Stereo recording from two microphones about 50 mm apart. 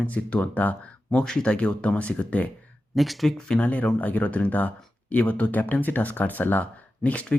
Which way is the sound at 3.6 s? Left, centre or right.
Left.